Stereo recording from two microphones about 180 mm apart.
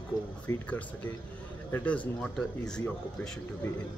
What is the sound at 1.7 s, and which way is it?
Speech, 10° left (ahead or behind).